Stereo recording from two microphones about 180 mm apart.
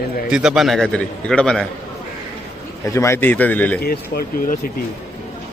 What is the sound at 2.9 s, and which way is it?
Speech, 15° left (ahead or behind).